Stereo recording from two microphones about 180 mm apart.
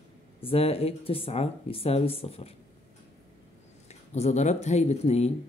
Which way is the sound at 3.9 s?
40° left (ahead or behind).